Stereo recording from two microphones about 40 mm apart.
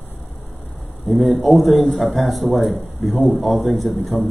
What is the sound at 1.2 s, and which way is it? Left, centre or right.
A man's voice, centre.